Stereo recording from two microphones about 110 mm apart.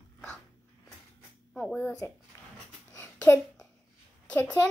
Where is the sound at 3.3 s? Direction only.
20° left (ahead or behind).